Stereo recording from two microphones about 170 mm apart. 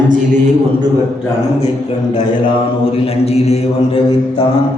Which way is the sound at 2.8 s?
35° left (ahead or behind).